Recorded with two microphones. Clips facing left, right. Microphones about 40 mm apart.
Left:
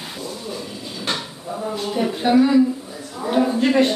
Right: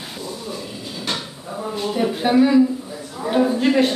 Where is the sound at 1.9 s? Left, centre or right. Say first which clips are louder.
Even; centre.